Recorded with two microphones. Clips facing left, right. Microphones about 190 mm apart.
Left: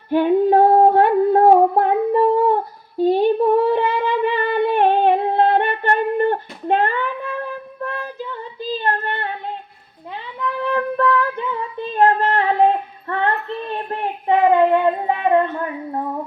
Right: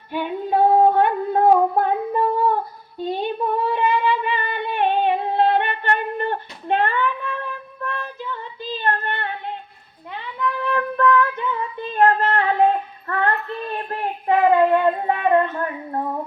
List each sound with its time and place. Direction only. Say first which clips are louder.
0.1 s singing: left 9 dB; 45° left (ahead or behind)
3.2 s humming: left 7 dB; 45° left (ahead or behind)
8.8 s female singing: right 1 dB; 35° left (ahead or behind)
10.6 s music: left 2 dB; 30° left (ahead or behind)
11.9 s female singing: left 1 dB; 30° left (ahead or behind)
15.0 s child singing: left 1 dB; 15° left (ahead or behind)